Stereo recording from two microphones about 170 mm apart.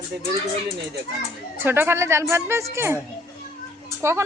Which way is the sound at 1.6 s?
15° right (ahead or behind).